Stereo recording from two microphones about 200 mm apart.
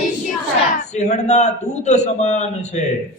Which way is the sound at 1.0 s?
35° left (ahead or behind).